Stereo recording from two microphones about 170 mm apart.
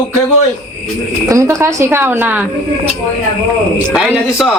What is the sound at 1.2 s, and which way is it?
Speech, 20° right (ahead or behind).